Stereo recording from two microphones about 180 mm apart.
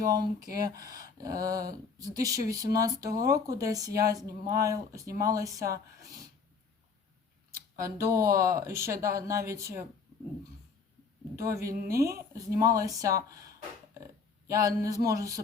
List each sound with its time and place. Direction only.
0.0 s speech: 20° right (ahead or behind)
7.8 s speech: 15° right (ahead or behind)
11.3 s speech: 15° right (ahead or behind)
11.7 s speech: 55° right (ahead or behind)
12.3 s speech: 20° right (ahead or behind)
14.4 s speech: 20° right (ahead or behind)